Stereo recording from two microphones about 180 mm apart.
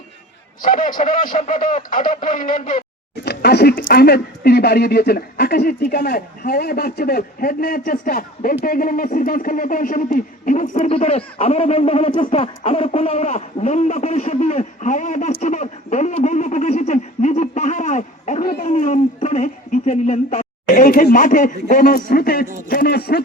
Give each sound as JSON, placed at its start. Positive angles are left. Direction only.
{"t": 0.6, "sound": "speech", "side_deg": 50}
{"t": 3.2, "sound": "speech", "side_deg": 65}